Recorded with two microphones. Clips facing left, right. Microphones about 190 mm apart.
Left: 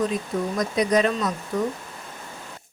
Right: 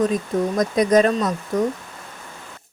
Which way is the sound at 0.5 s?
45° right (ahead or behind).